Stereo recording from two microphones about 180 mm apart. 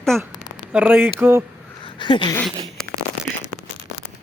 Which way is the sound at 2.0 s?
25° left (ahead or behind).